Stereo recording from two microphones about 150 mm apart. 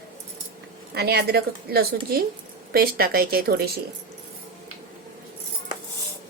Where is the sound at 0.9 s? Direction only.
90° right.